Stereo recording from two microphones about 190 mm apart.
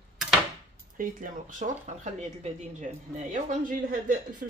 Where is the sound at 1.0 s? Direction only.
45° right (ahead or behind).